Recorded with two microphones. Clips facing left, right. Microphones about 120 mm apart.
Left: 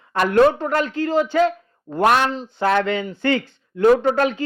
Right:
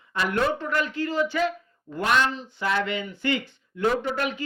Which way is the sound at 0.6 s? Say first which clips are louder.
Left 6 dB; 30° left (ahead or behind).